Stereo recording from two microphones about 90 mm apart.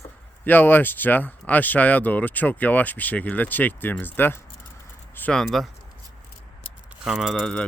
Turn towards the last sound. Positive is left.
turn(degrees=0)  # may be behind; listen again after turning